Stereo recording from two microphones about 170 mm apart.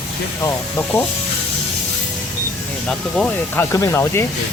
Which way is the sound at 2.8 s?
5° left (ahead or behind).